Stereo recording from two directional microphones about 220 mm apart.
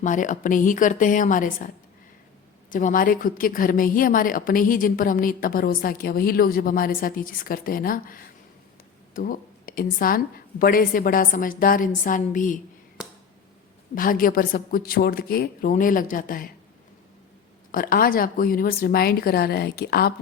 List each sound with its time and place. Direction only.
0.0 s a woman's voice: 35° left (ahead or behind)
13.9 s a woman's voice: 40° left (ahead or behind)
17.7 s speech: 40° left (ahead or behind)